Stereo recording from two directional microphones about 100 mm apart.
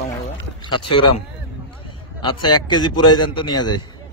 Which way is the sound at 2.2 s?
50° left (ahead or behind).